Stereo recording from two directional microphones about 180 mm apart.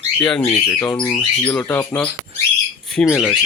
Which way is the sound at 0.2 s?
5° left (ahead or behind).